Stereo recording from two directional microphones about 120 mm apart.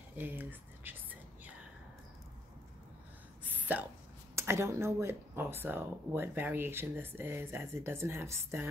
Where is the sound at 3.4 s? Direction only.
15° right (ahead or behind).